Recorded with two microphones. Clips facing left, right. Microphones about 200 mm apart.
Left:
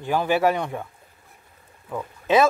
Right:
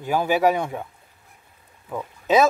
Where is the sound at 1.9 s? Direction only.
5° right (ahead or behind).